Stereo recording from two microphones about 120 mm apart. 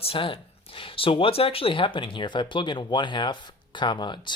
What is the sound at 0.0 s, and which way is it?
Speech, 50° left (ahead or behind).